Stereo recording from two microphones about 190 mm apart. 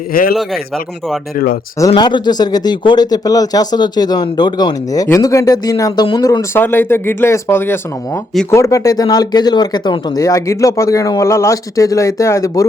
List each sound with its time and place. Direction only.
0.1 s a man's voice: 50° left (ahead or behind)
1.9 s speech: 25° left (ahead or behind)